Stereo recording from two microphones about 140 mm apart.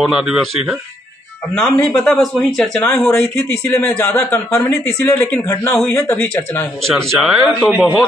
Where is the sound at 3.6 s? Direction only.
20° left (ahead or behind).